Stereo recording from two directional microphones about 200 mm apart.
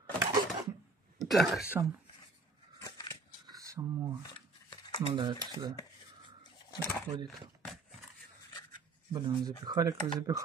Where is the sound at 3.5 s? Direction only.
15° right (ahead or behind).